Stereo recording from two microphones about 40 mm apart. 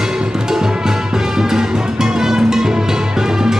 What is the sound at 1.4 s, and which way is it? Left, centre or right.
Music, centre.